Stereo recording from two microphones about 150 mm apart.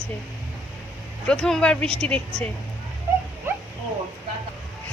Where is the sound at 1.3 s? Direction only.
5° left (ahead or behind).